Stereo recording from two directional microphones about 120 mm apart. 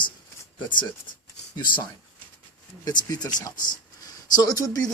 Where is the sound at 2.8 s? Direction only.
35° left (ahead or behind).